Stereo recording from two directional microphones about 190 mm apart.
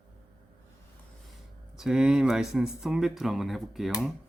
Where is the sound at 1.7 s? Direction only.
Centre (ahead or behind).